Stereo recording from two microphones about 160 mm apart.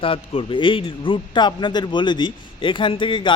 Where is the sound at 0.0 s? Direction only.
35° left (ahead or behind).